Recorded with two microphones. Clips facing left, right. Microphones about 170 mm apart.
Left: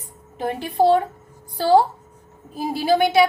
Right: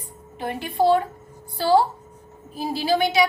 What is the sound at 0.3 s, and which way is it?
A woman's voice, 40° left (ahead or behind).